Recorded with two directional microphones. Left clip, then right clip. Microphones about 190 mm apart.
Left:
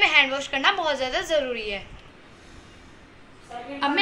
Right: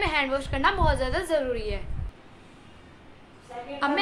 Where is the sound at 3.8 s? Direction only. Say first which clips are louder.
Left 1 dB; 20° right (ahead or behind).